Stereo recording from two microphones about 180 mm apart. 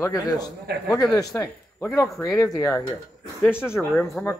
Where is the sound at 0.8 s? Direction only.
20° left (ahead or behind).